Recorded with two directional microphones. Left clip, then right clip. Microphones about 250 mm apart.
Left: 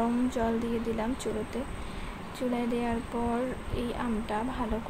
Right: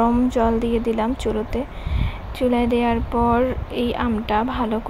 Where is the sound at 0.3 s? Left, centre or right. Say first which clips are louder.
Right 11 dB; right.